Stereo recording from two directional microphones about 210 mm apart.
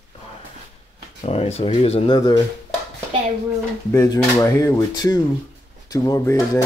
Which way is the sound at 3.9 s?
15° left (ahead or behind).